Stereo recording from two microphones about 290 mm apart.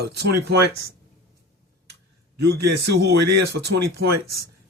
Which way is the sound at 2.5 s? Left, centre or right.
Right.